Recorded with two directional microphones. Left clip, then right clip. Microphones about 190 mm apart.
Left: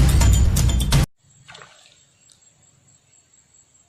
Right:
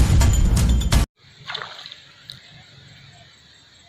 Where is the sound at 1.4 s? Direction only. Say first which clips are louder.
Right 12 dB; 25° left (ahead or behind).